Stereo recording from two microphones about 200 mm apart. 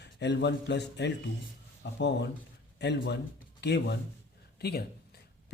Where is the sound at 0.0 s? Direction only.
60° left (ahead or behind).